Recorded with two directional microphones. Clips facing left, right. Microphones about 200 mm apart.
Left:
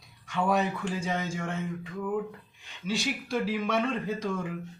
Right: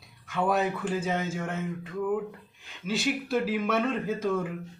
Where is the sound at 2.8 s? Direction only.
5° right (ahead or behind).